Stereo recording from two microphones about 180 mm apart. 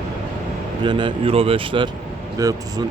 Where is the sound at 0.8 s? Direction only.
25° right (ahead or behind).